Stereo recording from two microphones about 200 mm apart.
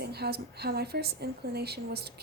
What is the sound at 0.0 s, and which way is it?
A woman's voice, 55° right (ahead or behind).